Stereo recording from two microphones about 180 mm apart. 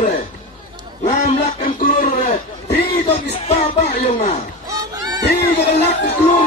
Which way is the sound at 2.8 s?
35° left (ahead or behind).